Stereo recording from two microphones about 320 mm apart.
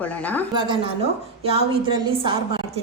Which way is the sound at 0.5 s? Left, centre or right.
Centre.